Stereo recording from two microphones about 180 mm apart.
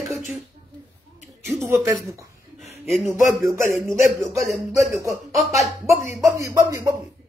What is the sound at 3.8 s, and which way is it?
Speech, 15° right (ahead or behind).